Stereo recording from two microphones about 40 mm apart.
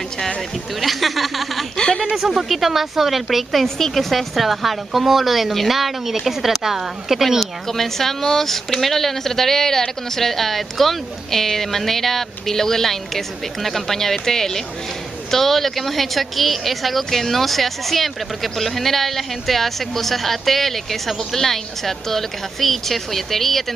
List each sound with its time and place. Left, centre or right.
0.7 s a woman's voice: centre
1.8 s a sound: left
2.1 s a woman's voice: centre
3.6 s a woman's voice: centre